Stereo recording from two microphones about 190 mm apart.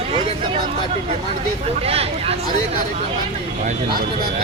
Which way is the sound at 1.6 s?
30° right (ahead or behind).